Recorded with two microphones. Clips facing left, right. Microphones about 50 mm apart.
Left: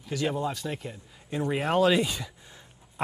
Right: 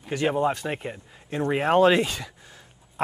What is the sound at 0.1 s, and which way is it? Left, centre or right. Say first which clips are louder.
Speech: right 5 dB; right.